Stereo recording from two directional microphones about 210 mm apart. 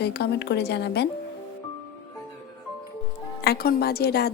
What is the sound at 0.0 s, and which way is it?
Speech, 50° left (ahead or behind).